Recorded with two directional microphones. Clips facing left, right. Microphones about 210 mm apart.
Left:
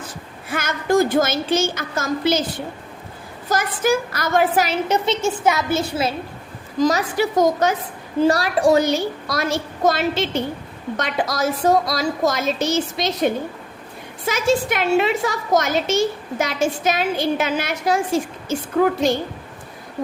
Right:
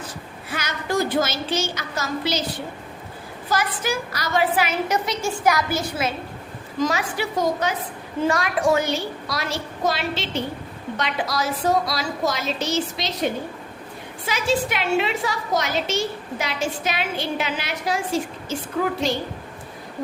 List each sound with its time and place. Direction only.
0.5 s a woman's voice: 50° left (ahead or behind)
3.5 s a woman's voice: 50° left (ahead or behind)
4.9 s a woman's voice: 25° left (ahead or behind); by 7.8 s 45° left (ahead or behind)
8.2 s a woman's voice: 35° left (ahead or behind)
14.3 s a woman's voice: 45° left (ahead or behind)